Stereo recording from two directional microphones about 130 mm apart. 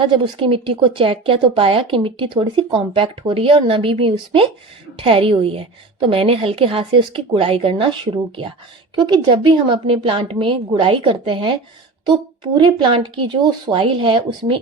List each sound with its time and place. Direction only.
0.0 s a woman's voice: 40° right (ahead or behind)